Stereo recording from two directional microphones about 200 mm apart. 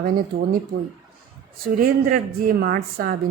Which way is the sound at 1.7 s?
45° right (ahead or behind).